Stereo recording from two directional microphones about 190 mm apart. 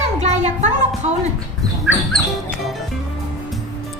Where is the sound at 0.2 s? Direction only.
35° right (ahead or behind).